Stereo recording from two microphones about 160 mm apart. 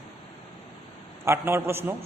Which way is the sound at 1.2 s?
15° right (ahead or behind).